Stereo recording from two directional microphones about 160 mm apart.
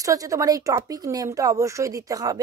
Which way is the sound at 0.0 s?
20° right (ahead or behind).